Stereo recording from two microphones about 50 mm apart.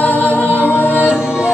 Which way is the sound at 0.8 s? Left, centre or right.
Right.